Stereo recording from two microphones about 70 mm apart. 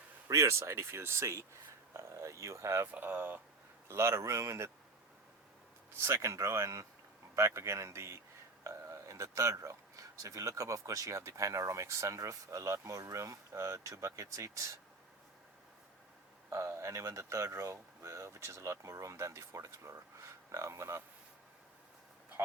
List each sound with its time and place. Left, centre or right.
0.3 s speech: right
2.9 s speech: right
3.8 s speech: right
6.0 s speech: right
16.5 s speech: right